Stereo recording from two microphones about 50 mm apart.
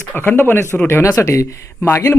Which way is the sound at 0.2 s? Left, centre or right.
Left.